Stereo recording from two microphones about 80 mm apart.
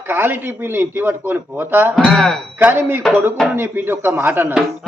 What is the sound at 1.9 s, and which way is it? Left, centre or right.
Speech, centre.